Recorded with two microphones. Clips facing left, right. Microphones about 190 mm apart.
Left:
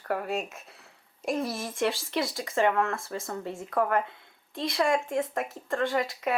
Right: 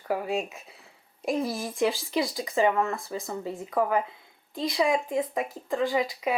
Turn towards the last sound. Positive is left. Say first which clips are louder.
# right 1 dB
turn(degrees=0)  # may be behind; listen again after turning